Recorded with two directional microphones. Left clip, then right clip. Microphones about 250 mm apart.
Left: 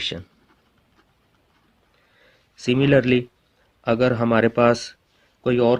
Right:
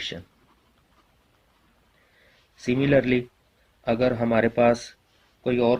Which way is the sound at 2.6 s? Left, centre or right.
Left.